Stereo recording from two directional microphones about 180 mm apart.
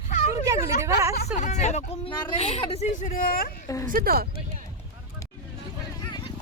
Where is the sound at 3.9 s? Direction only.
55° right (ahead or behind).